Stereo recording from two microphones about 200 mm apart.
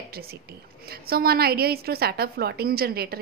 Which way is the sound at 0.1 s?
50° right (ahead or behind).